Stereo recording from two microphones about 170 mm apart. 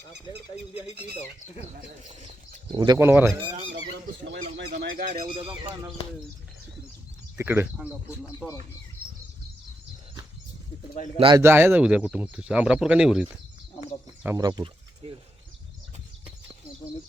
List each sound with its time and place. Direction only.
0.5 s speech: 40° left (ahead or behind)
2.0 s speech: 40° right (ahead or behind)
2.7 s speech: 25° right (ahead or behind)
3.9 s speech: 90° right
4.8 s speech: 60° right (ahead or behind)
5.2 s speech: 35° right (ahead or behind)
7.3 s speech: 15° right (ahead or behind)
11.3 s speech: 15° right (ahead or behind)
14.3 s speech: 20° right (ahead or behind)